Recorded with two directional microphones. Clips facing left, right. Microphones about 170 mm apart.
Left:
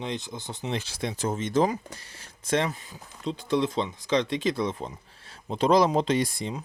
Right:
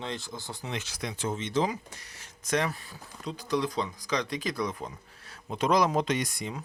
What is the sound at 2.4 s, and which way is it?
Speech, 25° left (ahead or behind).